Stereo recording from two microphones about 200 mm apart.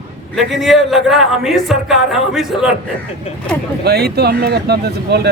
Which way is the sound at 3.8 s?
55° right (ahead or behind).